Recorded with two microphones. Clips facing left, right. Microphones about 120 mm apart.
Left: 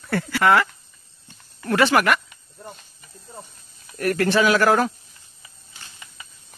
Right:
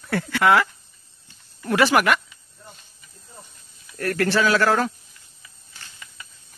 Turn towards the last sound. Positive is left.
turn(degrees=20)  # may be behind; listen again after turning